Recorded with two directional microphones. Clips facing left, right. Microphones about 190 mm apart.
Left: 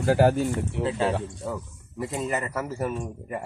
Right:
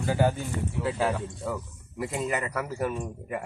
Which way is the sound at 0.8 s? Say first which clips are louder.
Left 1 dB; 25° left (ahead or behind).